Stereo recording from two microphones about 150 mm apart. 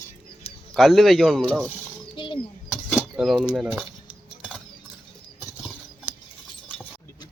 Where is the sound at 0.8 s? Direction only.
Centre (ahead or behind).